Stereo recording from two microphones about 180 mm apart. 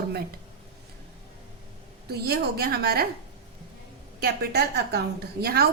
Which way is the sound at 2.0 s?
60° right (ahead or behind).